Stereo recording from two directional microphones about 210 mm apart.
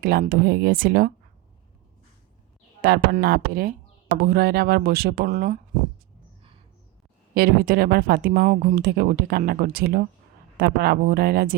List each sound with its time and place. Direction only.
0.0 s speech: 45° right (ahead or behind)
2.8 s speech: 45° right (ahead or behind)
7.3 s speech: 45° right (ahead or behind)